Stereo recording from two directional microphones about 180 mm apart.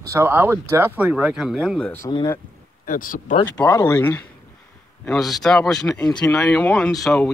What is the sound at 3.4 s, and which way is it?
Speech, 15° left (ahead or behind).